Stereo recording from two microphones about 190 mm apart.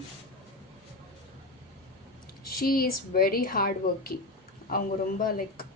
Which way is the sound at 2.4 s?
50° left (ahead or behind).